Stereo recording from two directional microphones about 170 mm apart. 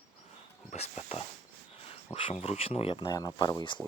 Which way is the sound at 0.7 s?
40° left (ahead or behind).